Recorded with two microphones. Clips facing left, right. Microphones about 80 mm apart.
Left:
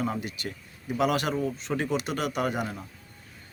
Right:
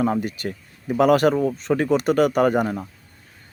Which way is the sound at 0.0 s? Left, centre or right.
Right.